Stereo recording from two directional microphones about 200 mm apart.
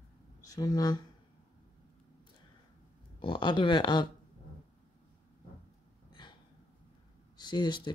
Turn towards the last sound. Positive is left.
turn(degrees=20)  # may be behind; listen again after turning